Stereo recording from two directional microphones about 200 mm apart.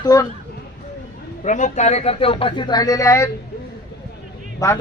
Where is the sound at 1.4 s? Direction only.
40° left (ahead or behind); by 3.2 s 15° left (ahead or behind).